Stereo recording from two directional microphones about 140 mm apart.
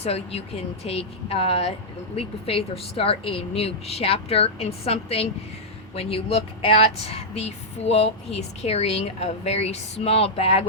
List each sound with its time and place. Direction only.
0.0 s speech: 45° left (ahead or behind)